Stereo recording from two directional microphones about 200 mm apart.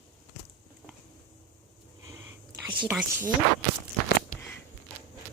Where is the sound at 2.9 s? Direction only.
10° right (ahead or behind).